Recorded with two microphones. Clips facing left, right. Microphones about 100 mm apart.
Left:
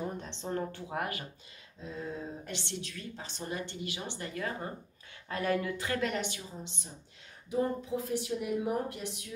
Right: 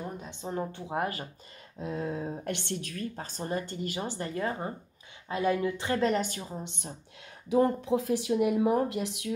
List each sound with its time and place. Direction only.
0.2 s speech: 10° right (ahead or behind); by 1.2 s 30° right (ahead or behind)
1.8 s speech: 65° right (ahead or behind); by 4.6 s 30° right (ahead or behind)
5.3 s a woman's voice: 20° right (ahead or behind); by 6.9 s 55° right (ahead or behind)
7.4 s speech: 85° right